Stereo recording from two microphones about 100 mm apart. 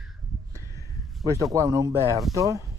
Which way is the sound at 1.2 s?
35° right (ahead or behind).